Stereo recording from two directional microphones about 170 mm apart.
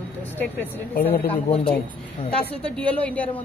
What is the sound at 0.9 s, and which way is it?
Speech, 60° left (ahead or behind).